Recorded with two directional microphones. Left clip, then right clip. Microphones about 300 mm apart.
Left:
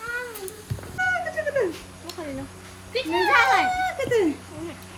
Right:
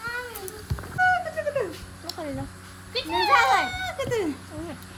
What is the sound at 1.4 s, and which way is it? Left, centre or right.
Dog, right.